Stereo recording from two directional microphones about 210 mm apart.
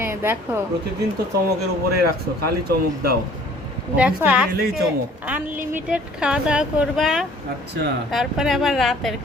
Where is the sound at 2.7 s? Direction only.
50° right (ahead or behind).